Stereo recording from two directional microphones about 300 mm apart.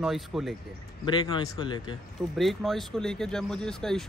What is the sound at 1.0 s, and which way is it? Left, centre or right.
Speech, centre.